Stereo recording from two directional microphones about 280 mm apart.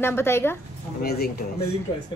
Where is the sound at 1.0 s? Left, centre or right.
Left.